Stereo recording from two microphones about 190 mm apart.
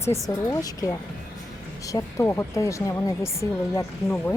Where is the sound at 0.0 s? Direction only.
15° left (ahead or behind).